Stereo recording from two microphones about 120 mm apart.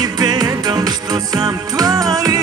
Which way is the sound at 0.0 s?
35° right (ahead or behind).